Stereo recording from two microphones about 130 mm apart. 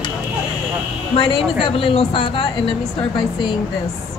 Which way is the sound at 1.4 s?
Centre (ahead or behind).